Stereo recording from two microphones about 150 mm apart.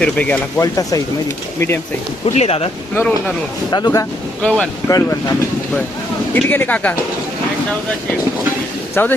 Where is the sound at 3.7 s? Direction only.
25° left (ahead or behind).